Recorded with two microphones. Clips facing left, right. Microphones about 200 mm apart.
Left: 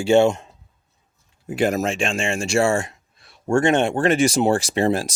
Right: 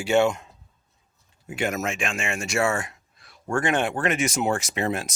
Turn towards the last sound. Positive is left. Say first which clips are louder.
# left 7 dB
turn(degrees=30)  # may be behind; listen again after turning